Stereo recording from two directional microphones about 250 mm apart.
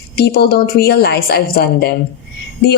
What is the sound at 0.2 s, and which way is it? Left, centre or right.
A woman's voice, left.